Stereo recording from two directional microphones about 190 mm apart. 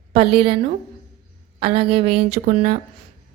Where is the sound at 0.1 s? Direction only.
30° right (ahead or behind).